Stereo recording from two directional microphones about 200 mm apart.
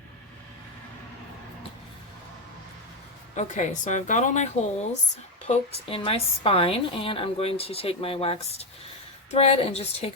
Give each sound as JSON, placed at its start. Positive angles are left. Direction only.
{"t": 3.3, "sound": "a woman's voice", "side_deg": 35}